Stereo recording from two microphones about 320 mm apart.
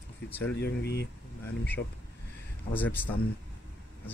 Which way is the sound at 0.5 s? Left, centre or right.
Left.